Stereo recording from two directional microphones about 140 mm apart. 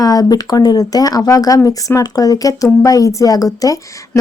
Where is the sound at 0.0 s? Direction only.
25° left (ahead or behind).